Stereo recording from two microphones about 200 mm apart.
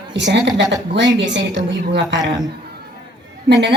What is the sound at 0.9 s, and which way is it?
A man's voice, 65° right (ahead or behind).